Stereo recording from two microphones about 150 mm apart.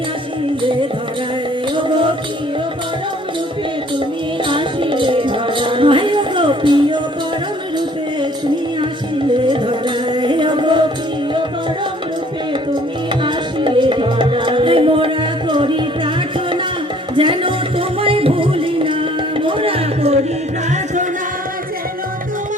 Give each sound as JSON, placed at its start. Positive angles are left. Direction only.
{"t": 1.7, "sound": "music", "side_deg": -35}
{"t": 4.4, "sound": "music", "side_deg": -35}
{"t": 9.5, "sound": "music", "side_deg": -30}
{"t": 13.2, "sound": "music", "side_deg": -30}
{"t": 17.2, "sound": "music", "side_deg": -35}